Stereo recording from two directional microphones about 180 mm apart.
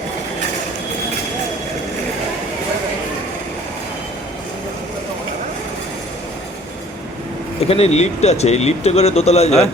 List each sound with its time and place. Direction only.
7.7 s speech: 35° left (ahead or behind)